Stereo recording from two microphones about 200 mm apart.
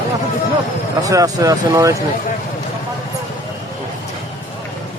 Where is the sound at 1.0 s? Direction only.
15° right (ahead or behind).